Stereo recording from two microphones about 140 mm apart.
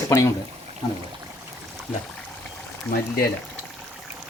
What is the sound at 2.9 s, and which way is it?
Speech, 90° left.